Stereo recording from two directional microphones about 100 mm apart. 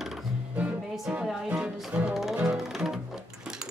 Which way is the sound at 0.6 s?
5° right (ahead or behind).